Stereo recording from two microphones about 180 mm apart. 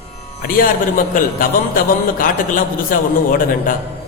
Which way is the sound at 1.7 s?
50° left (ahead or behind).